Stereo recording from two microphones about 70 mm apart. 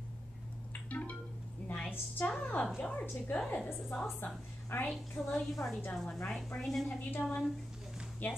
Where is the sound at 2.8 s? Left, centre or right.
Centre.